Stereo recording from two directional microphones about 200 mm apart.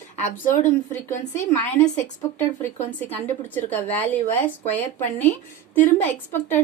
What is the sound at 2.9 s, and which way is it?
Speech, 10° left (ahead or behind).